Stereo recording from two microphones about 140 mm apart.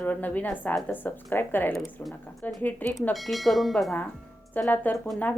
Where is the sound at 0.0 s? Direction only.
10° left (ahead or behind).